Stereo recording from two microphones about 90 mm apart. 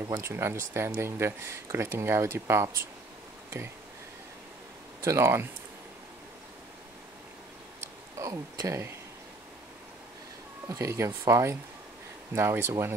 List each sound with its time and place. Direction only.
0.0 s speech: 30° right (ahead or behind)
5.0 s speech: 30° right (ahead or behind)
8.2 s speech: 40° right (ahead or behind)
10.7 s speech: 35° right (ahead or behind)